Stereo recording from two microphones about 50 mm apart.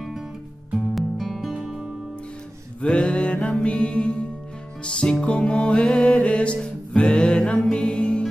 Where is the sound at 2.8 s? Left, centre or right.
Centre.